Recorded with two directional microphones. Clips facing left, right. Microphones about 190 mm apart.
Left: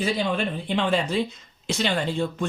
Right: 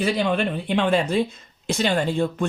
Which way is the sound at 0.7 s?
55° right (ahead or behind).